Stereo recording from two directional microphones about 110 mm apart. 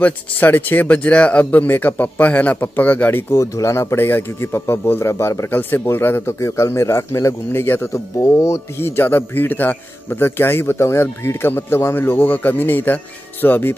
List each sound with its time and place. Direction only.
0.0 s speech: 15° left (ahead or behind)